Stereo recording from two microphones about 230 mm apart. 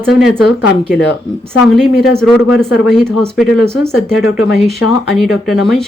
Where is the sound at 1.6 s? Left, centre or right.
Centre.